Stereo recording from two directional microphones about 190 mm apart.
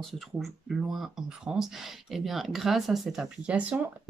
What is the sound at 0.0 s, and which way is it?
Speech, centre (ahead or behind).